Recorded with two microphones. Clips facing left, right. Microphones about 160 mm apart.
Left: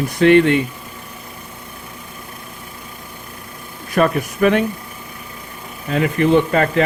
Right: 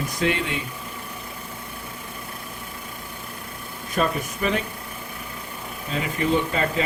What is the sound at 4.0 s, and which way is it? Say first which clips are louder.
Speech: left 8 dB; 65° left (ahead or behind).